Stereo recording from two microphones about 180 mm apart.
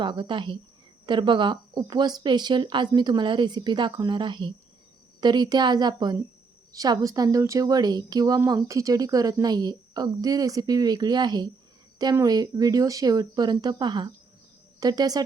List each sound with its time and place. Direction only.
0.0 s speech: 25° right (ahead or behind)